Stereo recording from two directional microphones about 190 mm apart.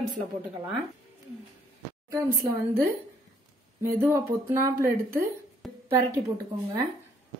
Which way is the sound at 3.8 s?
15° right (ahead or behind).